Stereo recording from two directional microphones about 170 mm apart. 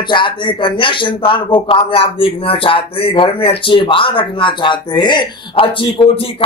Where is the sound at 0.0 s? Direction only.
30° left (ahead or behind).